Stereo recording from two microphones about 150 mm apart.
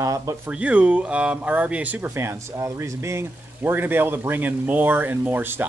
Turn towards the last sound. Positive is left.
turn(degrees=-15)  # may be behind; listen again after turning